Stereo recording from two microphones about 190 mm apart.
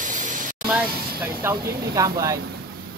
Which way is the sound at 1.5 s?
20° right (ahead or behind).